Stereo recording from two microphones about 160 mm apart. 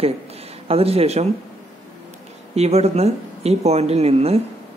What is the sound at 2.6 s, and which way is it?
Speech, 40° right (ahead or behind).